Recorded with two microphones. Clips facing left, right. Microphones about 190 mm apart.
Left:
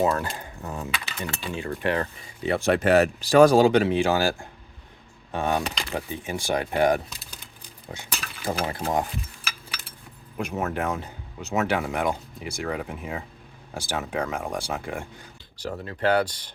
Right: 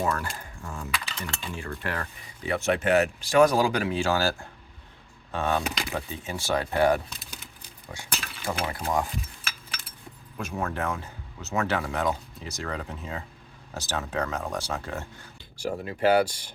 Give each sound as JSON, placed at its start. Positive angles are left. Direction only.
{"t": 0.0, "sound": "speech", "side_deg": 25}
{"t": 8.7, "sound": "speech", "side_deg": 25}
{"t": 10.3, "sound": "speech", "side_deg": 20}
{"t": 15.5, "sound": "speech", "side_deg": -10}